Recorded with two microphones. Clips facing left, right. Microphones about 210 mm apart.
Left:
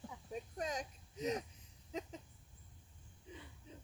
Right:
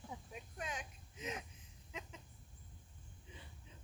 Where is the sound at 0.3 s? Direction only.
40° left (ahead or behind).